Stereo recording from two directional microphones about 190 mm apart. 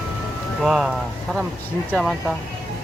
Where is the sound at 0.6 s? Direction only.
Centre (ahead or behind).